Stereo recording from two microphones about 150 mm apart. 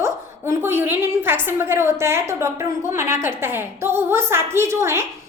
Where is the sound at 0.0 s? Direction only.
15° right (ahead or behind).